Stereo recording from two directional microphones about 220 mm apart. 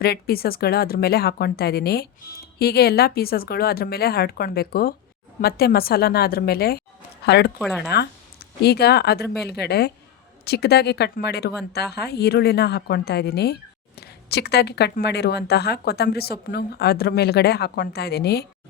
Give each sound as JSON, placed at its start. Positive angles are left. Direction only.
{"t": 0.0, "sound": "speech", "side_deg": 45}